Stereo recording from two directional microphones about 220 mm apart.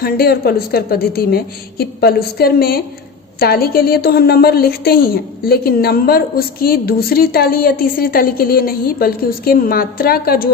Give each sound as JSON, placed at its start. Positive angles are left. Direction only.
{"t": 0.0, "sound": "a woman's voice", "side_deg": 45}